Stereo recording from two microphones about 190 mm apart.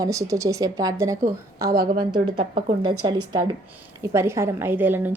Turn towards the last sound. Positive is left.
turn(degrees=-10)  # may be behind; listen again after turning